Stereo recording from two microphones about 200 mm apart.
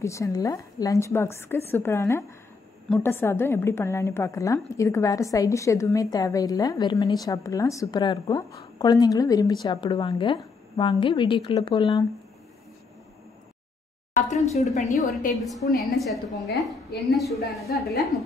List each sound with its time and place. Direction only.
0.0 s a woman's voice: 15° left (ahead or behind)
14.1 s a woman's voice: 35° left (ahead or behind)
15.3 s a woman's voice: centre (ahead or behind)
17.7 s a woman's voice: 50° left (ahead or behind)